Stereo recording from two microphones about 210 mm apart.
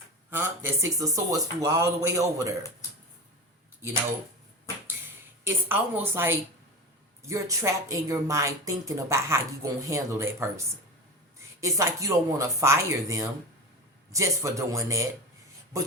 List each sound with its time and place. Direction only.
0.3 s speech: 10° right (ahead or behind)
5.5 s speech: 10° right (ahead or behind)